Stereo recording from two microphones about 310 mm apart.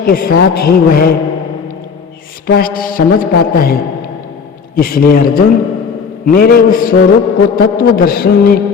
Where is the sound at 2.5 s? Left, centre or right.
Left.